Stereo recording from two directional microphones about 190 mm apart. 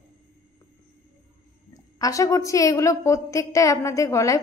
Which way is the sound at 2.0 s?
15° left (ahead or behind).